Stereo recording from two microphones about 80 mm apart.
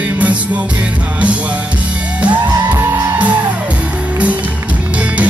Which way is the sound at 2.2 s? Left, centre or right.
Centre.